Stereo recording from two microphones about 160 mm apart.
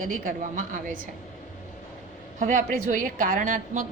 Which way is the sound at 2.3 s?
55° right (ahead or behind).